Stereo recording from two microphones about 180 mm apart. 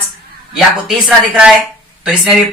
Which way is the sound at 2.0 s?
Centre (ahead or behind).